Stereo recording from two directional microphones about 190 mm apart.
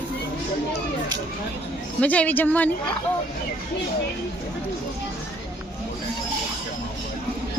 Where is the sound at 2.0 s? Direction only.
5° left (ahead or behind).